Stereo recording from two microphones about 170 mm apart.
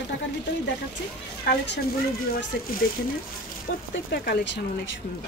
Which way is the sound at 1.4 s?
90° left.